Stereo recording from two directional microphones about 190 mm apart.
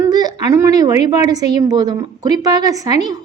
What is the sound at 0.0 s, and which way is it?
A woman's voice, 20° right (ahead or behind).